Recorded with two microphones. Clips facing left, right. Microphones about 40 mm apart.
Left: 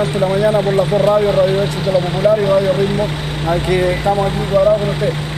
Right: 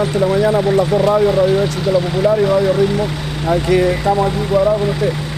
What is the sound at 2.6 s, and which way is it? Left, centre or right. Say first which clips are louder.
Speech: even; centre.